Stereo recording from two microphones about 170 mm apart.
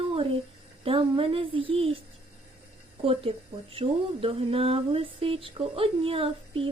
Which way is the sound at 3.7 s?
35° right (ahead or behind).